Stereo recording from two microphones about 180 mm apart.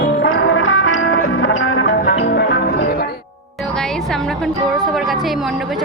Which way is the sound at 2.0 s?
70° left (ahead or behind).